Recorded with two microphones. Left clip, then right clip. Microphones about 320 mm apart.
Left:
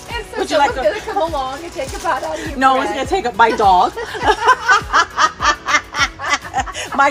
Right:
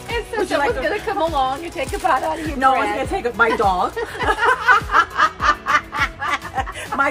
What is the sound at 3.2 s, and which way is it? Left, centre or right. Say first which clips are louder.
A woman's voice: left 5 dB; centre.